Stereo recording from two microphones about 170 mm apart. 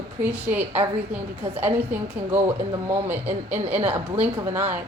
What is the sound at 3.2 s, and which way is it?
Speech, 35° right (ahead or behind).